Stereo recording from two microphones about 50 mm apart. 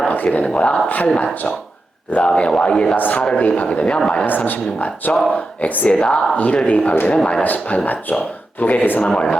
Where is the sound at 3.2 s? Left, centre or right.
Left.